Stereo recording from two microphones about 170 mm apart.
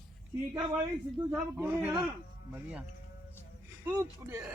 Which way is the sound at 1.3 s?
10° right (ahead or behind).